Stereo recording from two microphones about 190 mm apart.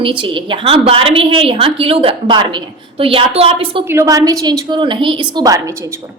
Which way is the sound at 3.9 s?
15° right (ahead or behind).